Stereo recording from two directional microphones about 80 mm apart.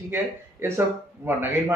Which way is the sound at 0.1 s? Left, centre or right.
Right.